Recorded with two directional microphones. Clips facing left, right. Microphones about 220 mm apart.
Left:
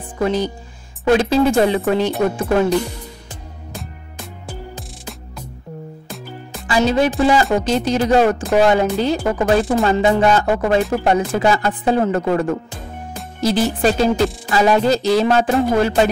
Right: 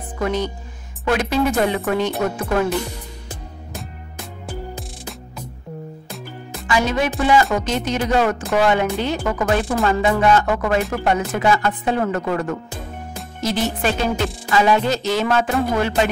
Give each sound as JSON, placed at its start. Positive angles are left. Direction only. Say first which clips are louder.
{"t": 0.2, "sound": "speech", "louder": "left 3 dB", "side_deg": 30}
{"t": 6.7, "sound": "speech", "louder": "left 4 dB", "side_deg": 30}